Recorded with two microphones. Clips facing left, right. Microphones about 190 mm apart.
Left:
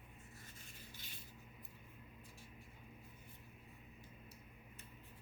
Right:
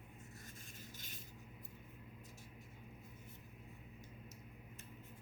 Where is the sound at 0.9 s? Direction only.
45° right (ahead or behind).